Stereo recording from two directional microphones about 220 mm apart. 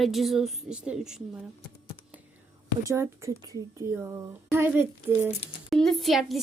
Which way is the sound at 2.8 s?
10° right (ahead or behind).